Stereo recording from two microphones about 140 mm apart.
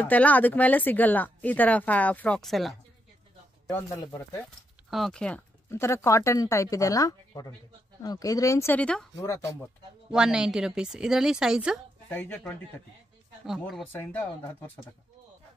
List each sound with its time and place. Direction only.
0.0 s speech: 10° left (ahead or behind)
3.7 s speech: 20° left (ahead or behind)
4.9 s a woman's voice: 5° left (ahead or behind)
5.7 s speech: 20° left (ahead or behind)
9.2 s speech: 20° left (ahead or behind)
10.1 s a woman's voice: 5° right (ahead or behind)
12.1 s speech: 15° left (ahead or behind)
13.5 s a woman's voice: centre (ahead or behind)
13.9 s speech: 15° left (ahead or behind)